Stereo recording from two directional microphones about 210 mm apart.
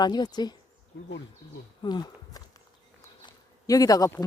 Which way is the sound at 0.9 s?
60° left (ahead or behind).